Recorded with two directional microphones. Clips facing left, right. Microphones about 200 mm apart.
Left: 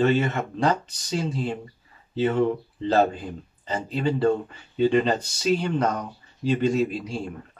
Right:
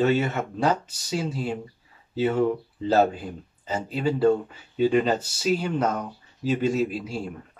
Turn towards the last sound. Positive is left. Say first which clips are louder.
# left 1 dB
turn(degrees=-5)  # may be behind; listen again after turning